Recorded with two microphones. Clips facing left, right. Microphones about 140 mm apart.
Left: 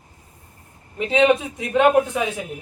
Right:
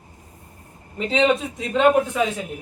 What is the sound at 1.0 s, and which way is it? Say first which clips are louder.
Speech: left 2 dB; 15° left (ahead or behind).